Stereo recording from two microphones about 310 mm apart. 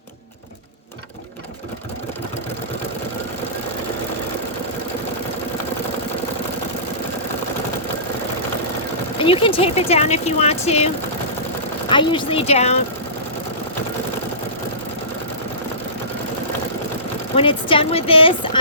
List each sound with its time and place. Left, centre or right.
9.1 s speech: centre
17.3 s a woman's voice: centre